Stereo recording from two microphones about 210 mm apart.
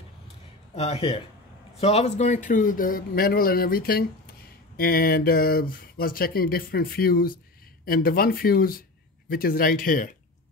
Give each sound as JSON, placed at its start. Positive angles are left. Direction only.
{"t": 0.7, "sound": "a man's voice", "side_deg": 30}